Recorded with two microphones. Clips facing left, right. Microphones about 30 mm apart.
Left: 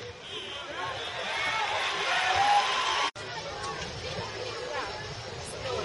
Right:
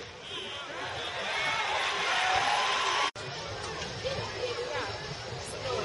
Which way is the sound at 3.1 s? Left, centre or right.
Left.